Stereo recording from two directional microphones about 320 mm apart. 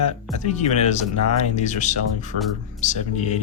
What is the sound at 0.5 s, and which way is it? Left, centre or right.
Music, left.